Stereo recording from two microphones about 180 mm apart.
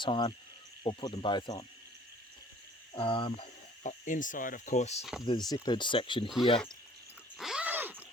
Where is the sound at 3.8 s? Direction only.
45° left (ahead or behind).